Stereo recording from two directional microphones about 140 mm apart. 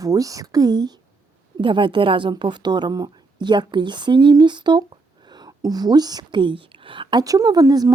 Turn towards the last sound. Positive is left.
turn(degrees=-25)  # may be behind; listen again after turning